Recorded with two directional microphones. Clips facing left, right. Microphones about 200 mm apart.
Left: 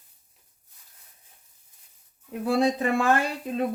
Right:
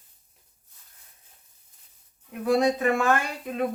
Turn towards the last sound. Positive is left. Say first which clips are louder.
# left 2 dB
turn(degrees=30)  # may be behind; listen again after turning